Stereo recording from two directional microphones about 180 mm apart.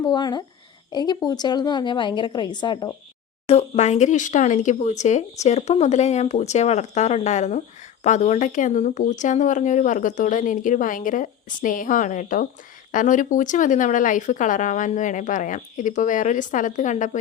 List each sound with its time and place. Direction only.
0.0 s a woman's voice: 25° left (ahead or behind)
3.4 s speech: 40° left (ahead or behind)